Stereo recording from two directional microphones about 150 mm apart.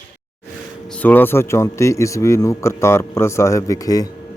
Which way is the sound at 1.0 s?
15° left (ahead or behind).